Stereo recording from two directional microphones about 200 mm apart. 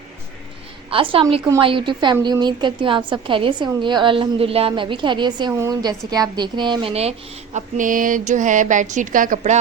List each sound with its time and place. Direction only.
0.9 s a woman's voice: 25° right (ahead or behind)
7.5 s a woman's voice: 40° right (ahead or behind)